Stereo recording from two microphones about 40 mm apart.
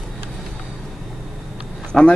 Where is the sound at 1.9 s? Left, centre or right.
Centre.